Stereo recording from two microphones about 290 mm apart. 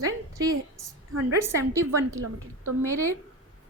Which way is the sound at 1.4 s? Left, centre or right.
Centre.